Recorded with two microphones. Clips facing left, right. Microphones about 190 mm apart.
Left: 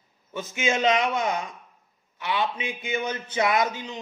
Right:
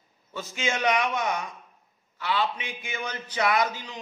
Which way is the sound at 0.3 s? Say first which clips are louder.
Left 4 dB; 20° left (ahead or behind).